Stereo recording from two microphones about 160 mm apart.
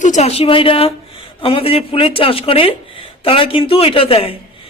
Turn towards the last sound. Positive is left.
turn(degrees=35)  # may be behind; listen again after turning